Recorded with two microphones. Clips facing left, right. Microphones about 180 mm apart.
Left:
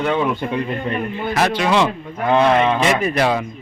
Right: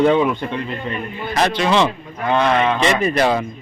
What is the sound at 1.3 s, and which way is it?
A man's voice, 5° left (ahead or behind).